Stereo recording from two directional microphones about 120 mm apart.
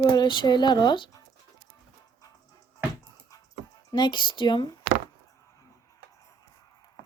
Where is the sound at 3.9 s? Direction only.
35° left (ahead or behind).